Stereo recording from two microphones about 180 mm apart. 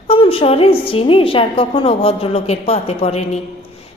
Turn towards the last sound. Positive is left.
turn(degrees=35)  # may be behind; listen again after turning